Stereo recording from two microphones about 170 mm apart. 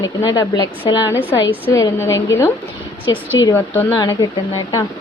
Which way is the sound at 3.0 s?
30° left (ahead or behind).